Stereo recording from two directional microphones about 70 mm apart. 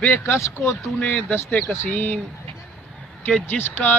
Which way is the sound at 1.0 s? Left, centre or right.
Centre.